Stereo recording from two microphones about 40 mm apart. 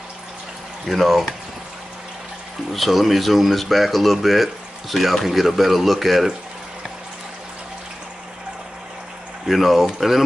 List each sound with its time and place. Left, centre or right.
0.8 s speech: centre
2.7 s speech: centre
9.5 s speech: centre